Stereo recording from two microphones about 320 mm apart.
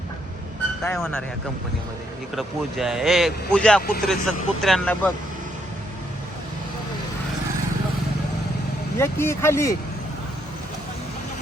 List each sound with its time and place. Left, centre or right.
0.9 s a man's voice: centre
2.3 s a man's voice: centre
9.0 s speech: centre